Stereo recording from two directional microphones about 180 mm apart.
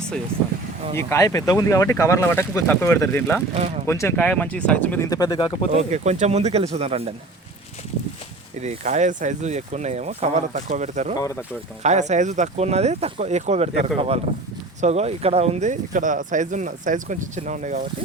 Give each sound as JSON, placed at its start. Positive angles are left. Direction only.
{"t": 0.9, "sound": "speech", "side_deg": 15}
{"t": 5.7, "sound": "speech", "side_deg": -40}
{"t": 8.6, "sound": "speech", "side_deg": -40}